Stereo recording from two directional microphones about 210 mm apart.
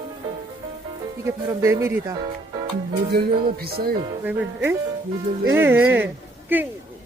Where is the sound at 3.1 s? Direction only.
50° right (ahead or behind).